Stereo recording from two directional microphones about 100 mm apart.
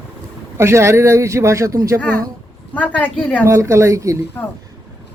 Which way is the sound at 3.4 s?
30° right (ahead or behind).